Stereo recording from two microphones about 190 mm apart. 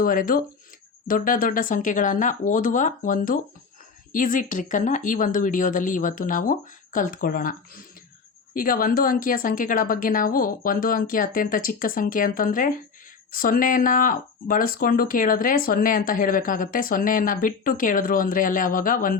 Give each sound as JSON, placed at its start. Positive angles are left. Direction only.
{"t": 0.0, "sound": "speech", "side_deg": 45}